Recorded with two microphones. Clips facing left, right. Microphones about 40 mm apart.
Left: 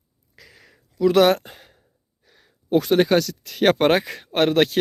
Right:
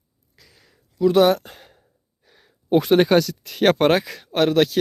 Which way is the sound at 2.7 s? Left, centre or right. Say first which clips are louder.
Right 2 dB; right.